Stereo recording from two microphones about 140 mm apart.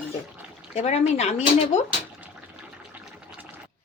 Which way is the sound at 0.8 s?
50° left (ahead or behind).